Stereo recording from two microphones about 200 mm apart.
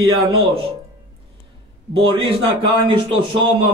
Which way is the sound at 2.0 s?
25° right (ahead or behind).